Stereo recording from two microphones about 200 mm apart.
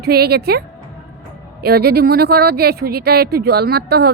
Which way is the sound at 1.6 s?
50° right (ahead or behind).